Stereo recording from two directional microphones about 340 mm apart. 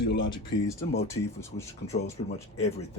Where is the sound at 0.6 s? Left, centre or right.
Centre.